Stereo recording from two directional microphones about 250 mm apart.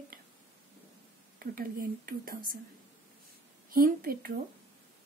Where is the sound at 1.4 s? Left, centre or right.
Right.